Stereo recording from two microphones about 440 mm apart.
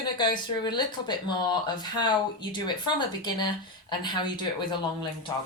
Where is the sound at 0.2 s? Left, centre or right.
Centre.